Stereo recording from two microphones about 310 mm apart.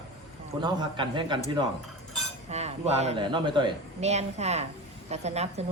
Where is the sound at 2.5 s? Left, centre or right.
Right.